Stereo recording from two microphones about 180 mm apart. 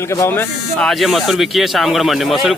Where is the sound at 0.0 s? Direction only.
15° left (ahead or behind).